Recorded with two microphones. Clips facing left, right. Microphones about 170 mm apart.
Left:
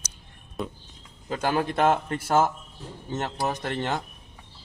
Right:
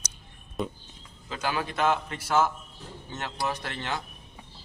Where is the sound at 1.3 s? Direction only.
50° left (ahead or behind).